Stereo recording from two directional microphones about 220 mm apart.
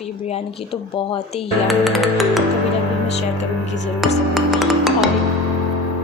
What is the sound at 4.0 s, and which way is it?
Music, centre (ahead or behind).